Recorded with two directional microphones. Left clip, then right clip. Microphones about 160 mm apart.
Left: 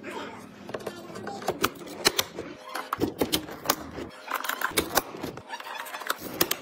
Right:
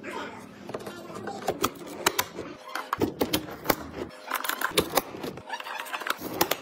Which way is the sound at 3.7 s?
Centre (ahead or behind).